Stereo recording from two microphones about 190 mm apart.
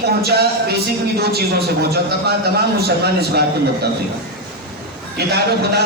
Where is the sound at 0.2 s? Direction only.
60° right (ahead or behind).